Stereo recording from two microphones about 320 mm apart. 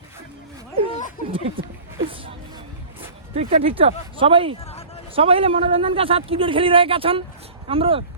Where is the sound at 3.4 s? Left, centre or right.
Centre.